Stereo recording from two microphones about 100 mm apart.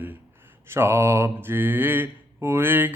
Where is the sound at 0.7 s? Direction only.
25° right (ahead or behind).